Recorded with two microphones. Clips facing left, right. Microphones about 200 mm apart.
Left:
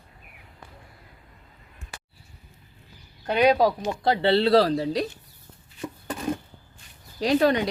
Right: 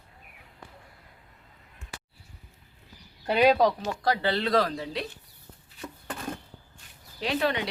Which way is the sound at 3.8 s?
25° left (ahead or behind).